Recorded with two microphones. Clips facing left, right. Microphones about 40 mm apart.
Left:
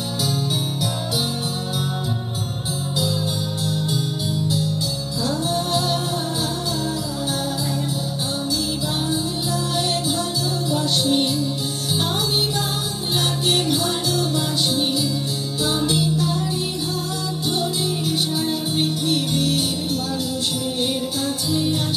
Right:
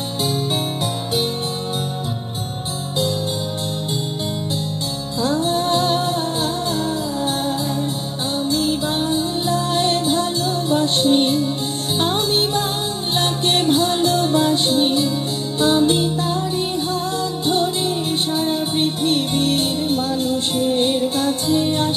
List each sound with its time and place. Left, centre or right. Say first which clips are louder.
5.2 s music: right 5 dB; right
8.5 s music: right 7 dB; right
17.5 s music: right 4 dB; right